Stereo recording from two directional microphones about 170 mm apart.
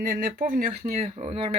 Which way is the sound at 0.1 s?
50° right (ahead or behind).